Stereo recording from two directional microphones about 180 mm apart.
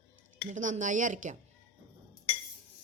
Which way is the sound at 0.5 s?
45° right (ahead or behind).